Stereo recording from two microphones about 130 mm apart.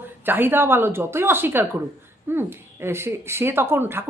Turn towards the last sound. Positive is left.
turn(degrees=-15)  # may be behind; listen again after turning